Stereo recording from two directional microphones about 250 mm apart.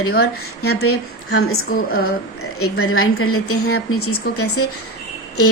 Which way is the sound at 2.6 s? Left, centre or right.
Left.